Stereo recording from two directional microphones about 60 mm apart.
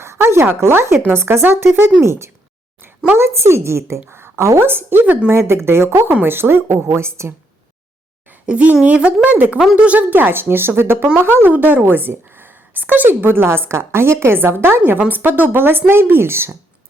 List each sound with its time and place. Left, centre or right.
0.0 s a sound: right
0.6 s a woman's voice: right
2.0 s a woman's voice: right
4.7 s a woman's voice: right
6.1 s a woman's voice: right
8.4 s a woman's voice: centre; by 16.6 s right